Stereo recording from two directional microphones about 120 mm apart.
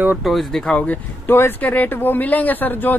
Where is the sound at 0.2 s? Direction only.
Centre (ahead or behind).